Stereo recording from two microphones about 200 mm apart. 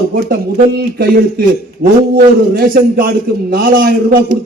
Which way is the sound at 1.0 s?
50° right (ahead or behind).